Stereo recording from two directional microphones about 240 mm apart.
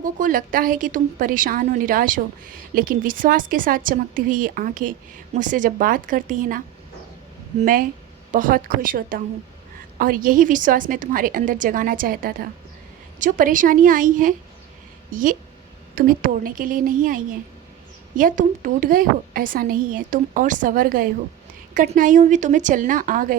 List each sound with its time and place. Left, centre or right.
0.0 s a woman's voice: right
7.6 s a woman's voice: right